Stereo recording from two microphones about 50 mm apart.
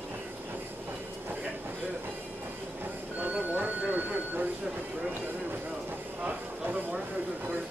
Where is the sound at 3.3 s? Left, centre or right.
Right.